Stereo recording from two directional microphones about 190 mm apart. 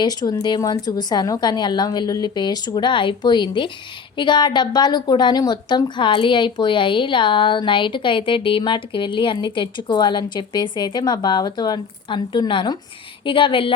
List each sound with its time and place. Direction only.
0.0 s a woman's voice: 20° left (ahead or behind)